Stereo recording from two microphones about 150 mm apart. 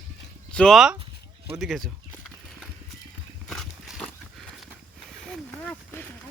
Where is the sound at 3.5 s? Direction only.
5° left (ahead or behind).